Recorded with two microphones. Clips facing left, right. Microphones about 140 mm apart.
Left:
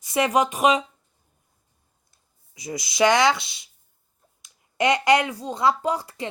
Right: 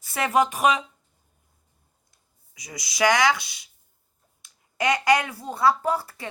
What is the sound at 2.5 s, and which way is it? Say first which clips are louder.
Speech: left 8 dB; 25° left (ahead or behind).